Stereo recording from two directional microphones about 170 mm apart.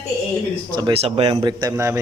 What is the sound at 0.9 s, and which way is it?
Speech, 35° right (ahead or behind).